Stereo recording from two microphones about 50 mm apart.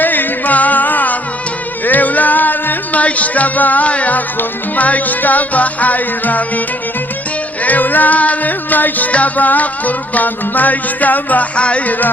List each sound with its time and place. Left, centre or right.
0.0 s music: left
7.6 s music: left